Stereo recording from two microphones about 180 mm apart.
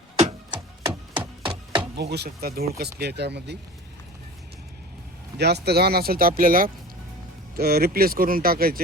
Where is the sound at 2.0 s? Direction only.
65° right (ahead or behind).